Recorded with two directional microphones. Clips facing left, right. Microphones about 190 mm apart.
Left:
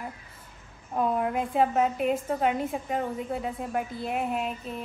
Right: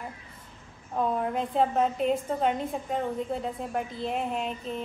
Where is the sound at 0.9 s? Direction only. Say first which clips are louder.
Left 1 dB; 10° left (ahead or behind).